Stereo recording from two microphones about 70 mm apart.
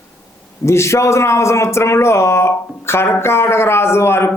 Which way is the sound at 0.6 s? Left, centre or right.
Left.